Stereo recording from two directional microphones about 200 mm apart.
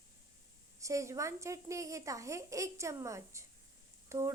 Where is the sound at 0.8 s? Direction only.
15° right (ahead or behind).